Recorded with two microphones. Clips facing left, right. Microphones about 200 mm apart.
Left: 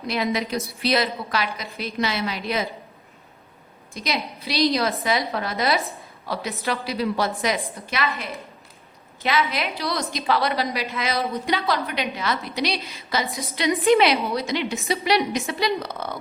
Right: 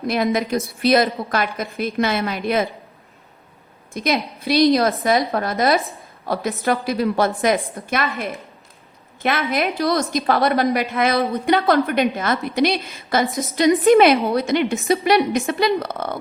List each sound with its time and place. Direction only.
0.1 s a woman's voice: 50° right (ahead or behind)
0.5 s speech: centre (ahead or behind)
0.8 s a woman's voice: 50° right (ahead or behind)
3.9 s a woman's voice: 50° right (ahead or behind)
9.2 s a woman's voice: 55° right (ahead or behind)